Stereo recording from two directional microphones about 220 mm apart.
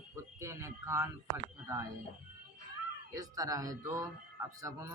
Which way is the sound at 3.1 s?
15° right (ahead or behind).